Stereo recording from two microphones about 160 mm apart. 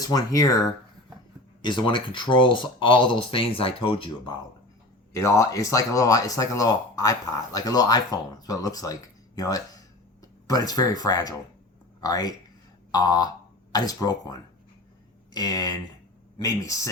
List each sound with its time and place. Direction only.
0.0 s speech: 20° left (ahead or behind)
5.1 s speech: 20° left (ahead or behind)